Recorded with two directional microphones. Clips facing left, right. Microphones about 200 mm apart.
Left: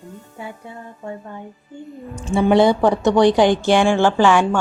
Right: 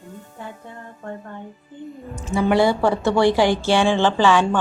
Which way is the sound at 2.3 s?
25° left (ahead or behind).